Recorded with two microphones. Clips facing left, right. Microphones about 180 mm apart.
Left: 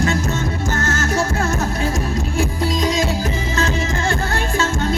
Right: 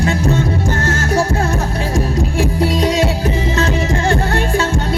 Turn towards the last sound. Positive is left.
turn(degrees=-35)  # may be behind; listen again after turning